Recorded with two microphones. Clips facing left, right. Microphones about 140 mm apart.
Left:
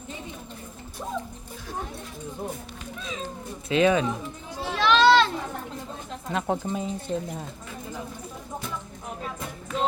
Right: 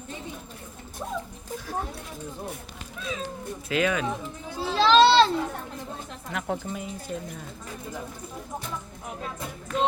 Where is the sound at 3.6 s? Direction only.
25° left (ahead or behind).